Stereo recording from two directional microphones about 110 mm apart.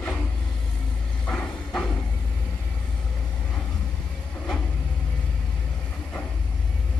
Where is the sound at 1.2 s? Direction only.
5° left (ahead or behind).